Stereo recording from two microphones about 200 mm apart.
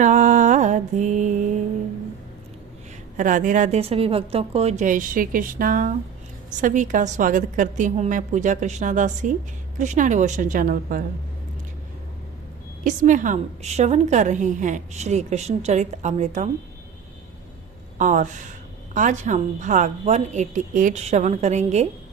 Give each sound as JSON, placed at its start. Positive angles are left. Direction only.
{"t": 0.0, "sound": "mantra", "side_deg": -40}
{"t": 3.2, "sound": "a woman's voice", "side_deg": -40}
{"t": 12.8, "sound": "a woman's voice", "side_deg": -40}
{"t": 17.9, "sound": "a woman's voice", "side_deg": -40}